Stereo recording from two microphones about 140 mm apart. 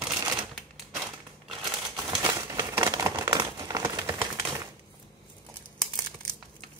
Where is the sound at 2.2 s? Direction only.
20° right (ahead or behind).